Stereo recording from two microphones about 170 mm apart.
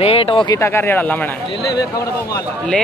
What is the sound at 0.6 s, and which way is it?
Speech, 15° left (ahead or behind).